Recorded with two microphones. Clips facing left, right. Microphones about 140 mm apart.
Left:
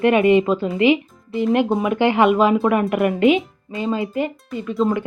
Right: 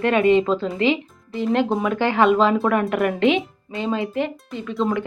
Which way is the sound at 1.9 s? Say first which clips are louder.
Left 2 dB; 15° left (ahead or behind).